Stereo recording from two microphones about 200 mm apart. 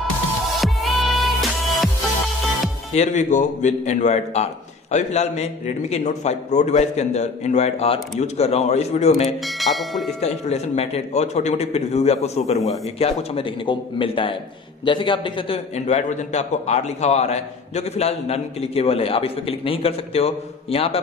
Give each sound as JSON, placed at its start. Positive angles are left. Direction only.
{"t": 0.6, "sound": "music", "side_deg": 0}
{"t": 2.9, "sound": "a man's voice", "side_deg": 35}
{"t": 9.6, "sound": "speech", "side_deg": 0}
{"t": 10.2, "sound": "a man's voice", "side_deg": 35}